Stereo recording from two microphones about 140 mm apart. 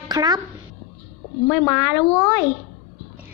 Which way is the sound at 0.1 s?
30° right (ahead or behind).